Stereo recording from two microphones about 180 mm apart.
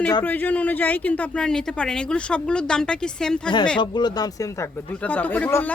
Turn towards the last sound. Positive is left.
turn(degrees=10)  # may be behind; listen again after turning